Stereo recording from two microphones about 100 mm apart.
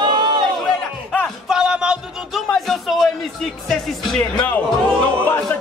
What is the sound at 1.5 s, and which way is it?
Music, 10° right (ahead or behind).